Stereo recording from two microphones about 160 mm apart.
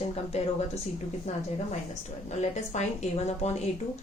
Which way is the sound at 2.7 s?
45° left (ahead or behind).